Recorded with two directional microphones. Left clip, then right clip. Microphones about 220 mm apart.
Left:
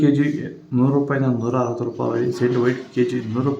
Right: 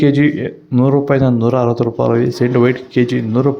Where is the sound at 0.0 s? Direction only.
35° right (ahead or behind).